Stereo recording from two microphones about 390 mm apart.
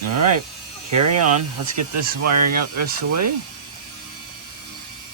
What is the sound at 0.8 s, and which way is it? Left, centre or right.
Speech, right.